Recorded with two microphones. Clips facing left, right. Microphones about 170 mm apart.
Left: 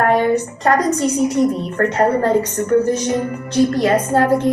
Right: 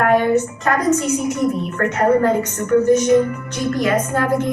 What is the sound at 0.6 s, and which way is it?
A woman's voice, 35° left (ahead or behind).